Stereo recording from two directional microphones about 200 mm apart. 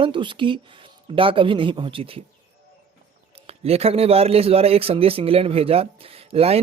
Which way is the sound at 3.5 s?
30° right (ahead or behind).